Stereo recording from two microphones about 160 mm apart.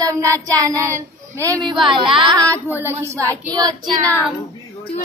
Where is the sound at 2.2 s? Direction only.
20° right (ahead or behind).